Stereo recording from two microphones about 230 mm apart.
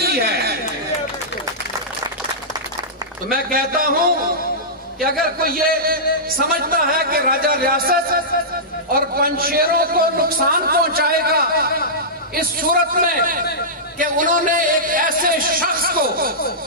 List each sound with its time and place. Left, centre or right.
0.0 s chatter: right
3.4 s a man's voice: right
5.4 s a man's voice: right